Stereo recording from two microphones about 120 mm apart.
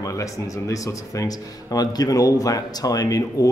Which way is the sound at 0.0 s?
25° left (ahead or behind).